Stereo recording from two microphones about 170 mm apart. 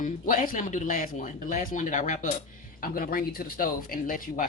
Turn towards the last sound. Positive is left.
turn(degrees=55)  # may be behind; listen again after turning